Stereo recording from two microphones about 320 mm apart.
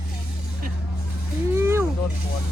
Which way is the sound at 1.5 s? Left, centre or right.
Centre.